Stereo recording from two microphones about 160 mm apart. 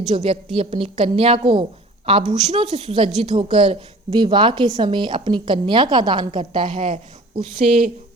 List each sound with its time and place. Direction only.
0.1 s a woman's voice: 40° right (ahead or behind)